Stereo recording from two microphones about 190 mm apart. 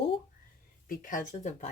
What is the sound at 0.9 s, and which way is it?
Speech, 45° left (ahead or behind).